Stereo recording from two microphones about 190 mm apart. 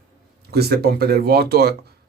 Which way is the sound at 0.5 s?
55° right (ahead or behind).